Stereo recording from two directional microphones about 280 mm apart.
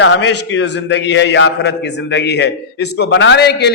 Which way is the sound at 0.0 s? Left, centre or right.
Left.